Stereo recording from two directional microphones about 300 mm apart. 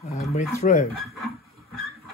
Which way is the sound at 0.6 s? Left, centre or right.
Left.